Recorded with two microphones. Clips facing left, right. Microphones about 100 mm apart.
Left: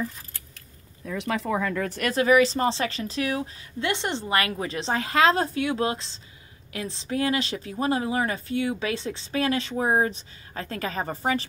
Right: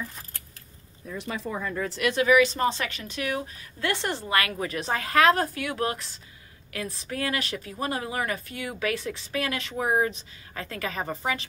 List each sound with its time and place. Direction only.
1.0 s speech: 85° left
1.9 s speech: 45° left (ahead or behind)
3.8 s a woman's voice: 20° left (ahead or behind); by 11.4 s 35° left (ahead or behind)